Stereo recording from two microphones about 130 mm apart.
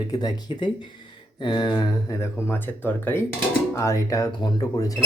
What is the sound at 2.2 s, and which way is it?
Speech, 20° left (ahead or behind).